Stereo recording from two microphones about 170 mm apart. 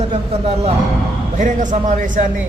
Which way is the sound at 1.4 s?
45° right (ahead or behind).